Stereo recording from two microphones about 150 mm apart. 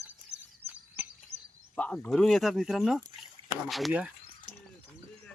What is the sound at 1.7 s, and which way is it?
Speech, 10° left (ahead or behind).